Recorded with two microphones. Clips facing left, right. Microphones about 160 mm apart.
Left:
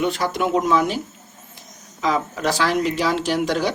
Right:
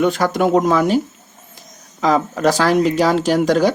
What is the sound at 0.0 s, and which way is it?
Speech, 45° right (ahead or behind).